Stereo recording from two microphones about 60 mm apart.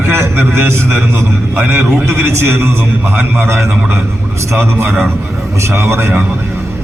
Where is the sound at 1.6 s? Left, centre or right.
Right.